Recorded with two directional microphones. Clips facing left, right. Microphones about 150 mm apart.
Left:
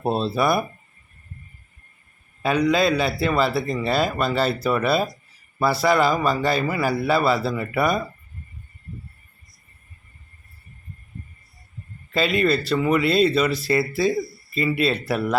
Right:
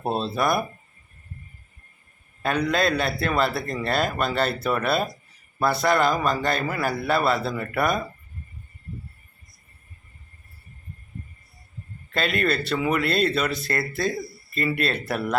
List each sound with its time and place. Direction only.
0.0 s a man's voice: centre (ahead or behind)
2.4 s a man's voice: centre (ahead or behind)
12.1 s a man's voice: centre (ahead or behind)